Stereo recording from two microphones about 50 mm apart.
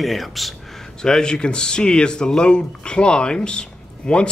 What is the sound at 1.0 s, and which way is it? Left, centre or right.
Speech, centre.